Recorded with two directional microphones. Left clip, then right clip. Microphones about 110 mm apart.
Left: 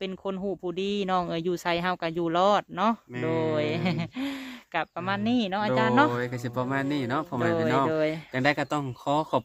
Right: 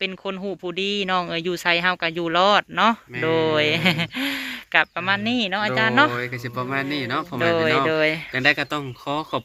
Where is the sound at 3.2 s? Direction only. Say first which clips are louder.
Right 7 dB; centre (ahead or behind).